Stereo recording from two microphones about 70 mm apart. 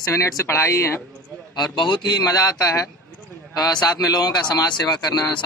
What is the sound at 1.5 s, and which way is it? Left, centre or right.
Speech, left.